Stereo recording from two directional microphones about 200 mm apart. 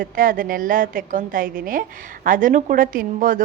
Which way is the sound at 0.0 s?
45° right (ahead or behind).